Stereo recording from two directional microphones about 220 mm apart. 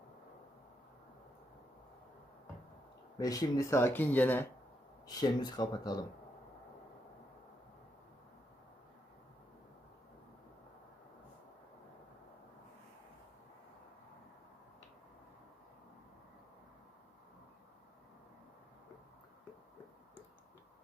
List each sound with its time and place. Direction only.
3.2 s speech: 15° left (ahead or behind)
5.0 s speech: 20° left (ahead or behind)